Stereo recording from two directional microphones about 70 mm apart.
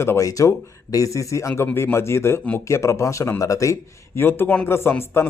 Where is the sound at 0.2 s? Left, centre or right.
Left.